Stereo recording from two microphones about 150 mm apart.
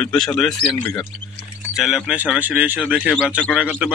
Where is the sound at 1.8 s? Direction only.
5° right (ahead or behind).